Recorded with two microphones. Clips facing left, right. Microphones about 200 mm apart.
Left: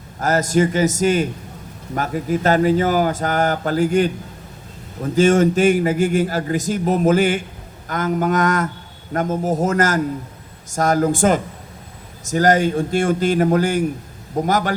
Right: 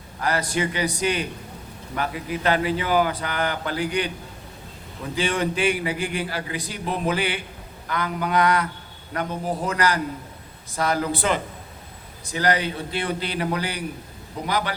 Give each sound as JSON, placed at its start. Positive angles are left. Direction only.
{"t": 0.2, "sound": "speech", "side_deg": 45}